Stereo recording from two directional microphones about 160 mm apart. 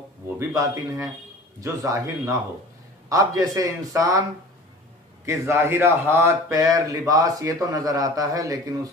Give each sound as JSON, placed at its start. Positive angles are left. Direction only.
{"t": 0.4, "sound": "a man's voice", "side_deg": -20}
{"t": 5.2, "sound": "a man's voice", "side_deg": -15}